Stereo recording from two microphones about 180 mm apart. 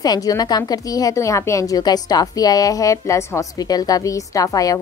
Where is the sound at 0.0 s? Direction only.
20° left (ahead or behind).